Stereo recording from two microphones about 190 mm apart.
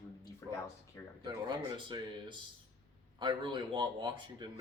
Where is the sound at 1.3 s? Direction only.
20° right (ahead or behind).